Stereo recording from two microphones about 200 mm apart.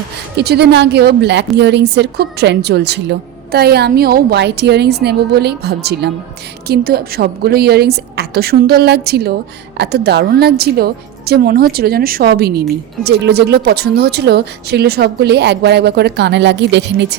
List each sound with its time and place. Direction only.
0.3 s a woman's voice: 55° right (ahead or behind)